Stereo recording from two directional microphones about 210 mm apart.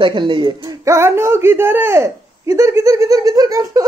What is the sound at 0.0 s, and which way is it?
A man's voice, 20° right (ahead or behind).